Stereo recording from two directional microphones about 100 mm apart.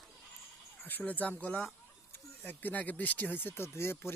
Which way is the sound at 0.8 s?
15° left (ahead or behind).